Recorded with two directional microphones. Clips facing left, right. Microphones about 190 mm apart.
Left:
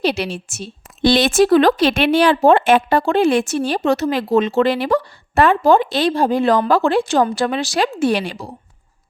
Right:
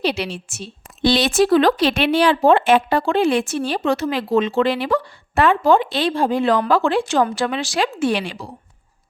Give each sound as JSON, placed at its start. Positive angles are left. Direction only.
{"t": 0.0, "sound": "a woman's voice", "side_deg": 45}